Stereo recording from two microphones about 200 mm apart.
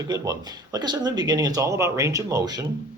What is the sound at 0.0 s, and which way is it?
Speech, 20° right (ahead or behind).